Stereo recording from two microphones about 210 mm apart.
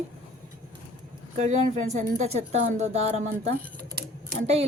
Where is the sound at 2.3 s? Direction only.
30° right (ahead or behind).